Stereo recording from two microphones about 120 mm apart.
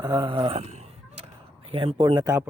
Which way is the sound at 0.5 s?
65° right (ahead or behind).